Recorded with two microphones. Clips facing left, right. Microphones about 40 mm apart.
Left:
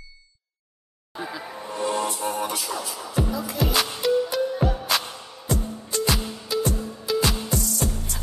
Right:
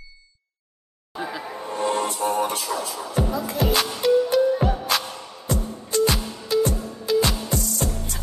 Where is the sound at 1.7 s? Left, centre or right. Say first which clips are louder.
Right 2 dB; right.